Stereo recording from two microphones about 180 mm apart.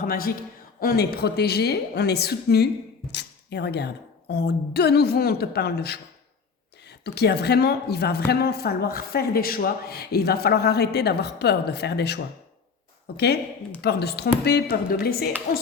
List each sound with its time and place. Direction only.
0.0 s a man's voice: 55° left (ahead or behind)